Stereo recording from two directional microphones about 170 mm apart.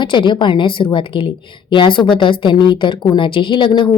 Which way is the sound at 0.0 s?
30° left (ahead or behind).